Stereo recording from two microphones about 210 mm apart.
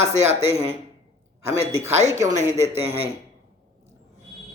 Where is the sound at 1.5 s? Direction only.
10° right (ahead or behind).